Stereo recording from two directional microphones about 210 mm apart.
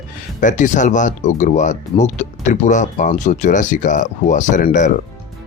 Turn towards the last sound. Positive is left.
turn(degrees=35)  # may be behind; listen again after turning